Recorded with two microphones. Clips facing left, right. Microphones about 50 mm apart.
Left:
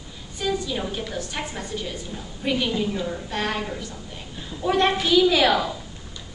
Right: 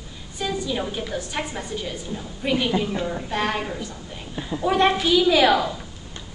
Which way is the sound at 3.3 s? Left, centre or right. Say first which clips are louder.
Right 2 dB; centre.